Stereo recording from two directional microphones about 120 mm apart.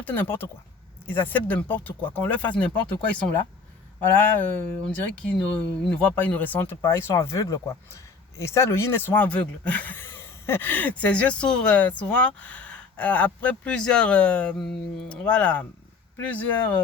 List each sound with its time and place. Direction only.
0.0 s speech: 15° left (ahead or behind)
4.1 s speech: 10° left (ahead or behind)